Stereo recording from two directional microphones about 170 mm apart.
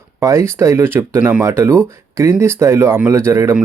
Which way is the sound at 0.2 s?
15° right (ahead or behind).